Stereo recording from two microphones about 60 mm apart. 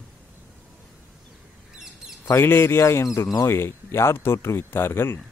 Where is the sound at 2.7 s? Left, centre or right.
Left.